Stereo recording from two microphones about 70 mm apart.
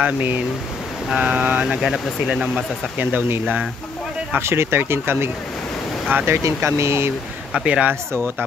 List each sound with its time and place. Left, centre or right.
0.0 s speech: right
1.8 s speech: centre
2.4 s speech: centre
4.4 s speech: right
6.4 s speech: right
7.6 s speech: centre